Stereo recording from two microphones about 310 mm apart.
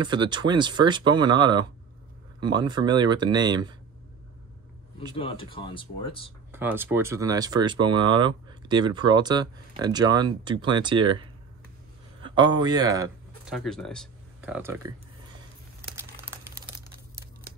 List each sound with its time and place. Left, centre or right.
0.0 s speech: centre
5.1 s speech: centre
6.5 s speech: centre
13.6 s speech: centre
16.0 s crumpling: centre